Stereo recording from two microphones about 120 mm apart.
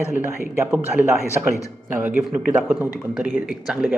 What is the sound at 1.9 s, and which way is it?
Speech, 15° right (ahead or behind).